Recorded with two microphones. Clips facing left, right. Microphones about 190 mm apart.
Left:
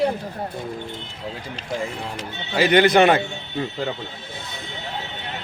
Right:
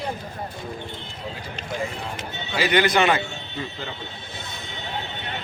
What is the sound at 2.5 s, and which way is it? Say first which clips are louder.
A man's voice: left 5 dB; 50° left (ahead or behind).